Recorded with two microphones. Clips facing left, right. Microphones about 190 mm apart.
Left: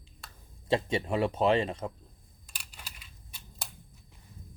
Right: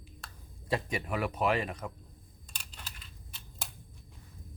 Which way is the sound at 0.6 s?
25° left (ahead or behind).